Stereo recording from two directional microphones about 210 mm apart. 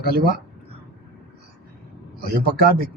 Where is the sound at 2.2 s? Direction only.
45° right (ahead or behind).